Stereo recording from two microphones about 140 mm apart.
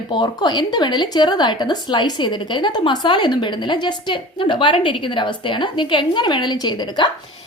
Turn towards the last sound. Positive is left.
turn(degrees=30)  # may be behind; listen again after turning